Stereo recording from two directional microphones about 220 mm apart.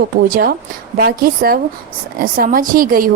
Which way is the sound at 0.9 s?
45° right (ahead or behind).